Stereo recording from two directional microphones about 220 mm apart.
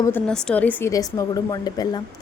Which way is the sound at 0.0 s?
5° left (ahead or behind).